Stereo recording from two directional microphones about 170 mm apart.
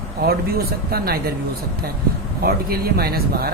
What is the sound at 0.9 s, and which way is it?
Speech, 65° right (ahead or behind).